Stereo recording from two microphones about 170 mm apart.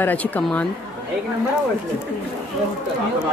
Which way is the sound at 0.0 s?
10° left (ahead or behind).